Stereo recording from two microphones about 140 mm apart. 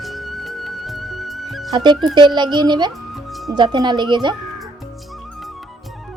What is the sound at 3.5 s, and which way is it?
Speech, 30° right (ahead or behind).